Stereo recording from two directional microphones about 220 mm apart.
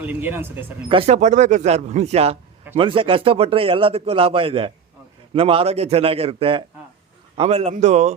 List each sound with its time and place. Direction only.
0.0 s speech: 10° right (ahead or behind)
0.9 s a man's voice: 25° right (ahead or behind)